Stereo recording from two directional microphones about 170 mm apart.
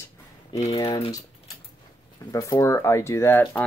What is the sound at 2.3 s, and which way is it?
Speech, 20° left (ahead or behind).